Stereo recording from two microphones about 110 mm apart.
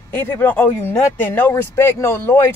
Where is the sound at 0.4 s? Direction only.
15° left (ahead or behind).